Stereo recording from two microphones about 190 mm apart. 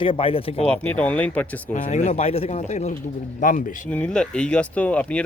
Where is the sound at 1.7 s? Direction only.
40° left (ahead or behind).